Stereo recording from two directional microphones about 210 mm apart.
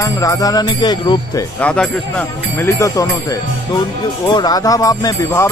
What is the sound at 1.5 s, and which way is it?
Music, 5° left (ahead or behind).